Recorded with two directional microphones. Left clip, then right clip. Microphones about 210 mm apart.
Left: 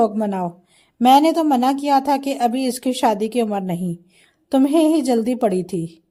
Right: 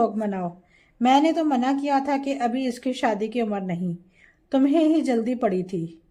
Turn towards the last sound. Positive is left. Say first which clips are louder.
# left 4 dB
turn(degrees=30)  # may be behind; listen again after turning